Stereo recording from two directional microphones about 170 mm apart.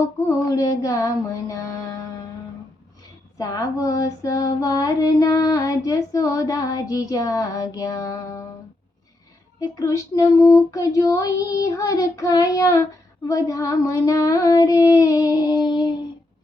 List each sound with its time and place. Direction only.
0.3 s female singing: 20° left (ahead or behind)
3.3 s female singing: 20° left (ahead or behind)
9.6 s female singing: 20° left (ahead or behind)